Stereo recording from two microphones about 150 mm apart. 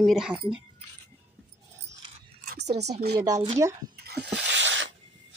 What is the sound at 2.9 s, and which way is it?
Speech, 90° right.